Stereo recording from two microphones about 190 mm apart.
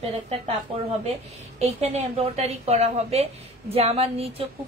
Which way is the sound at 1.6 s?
35° right (ahead or behind).